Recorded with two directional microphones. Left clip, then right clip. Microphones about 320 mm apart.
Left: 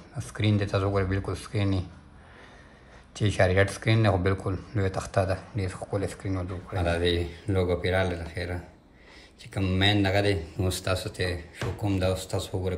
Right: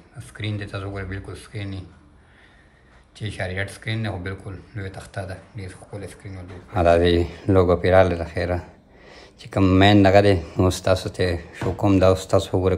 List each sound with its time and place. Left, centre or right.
0.2 s speech: centre
3.2 s speech: centre
6.7 s speech: centre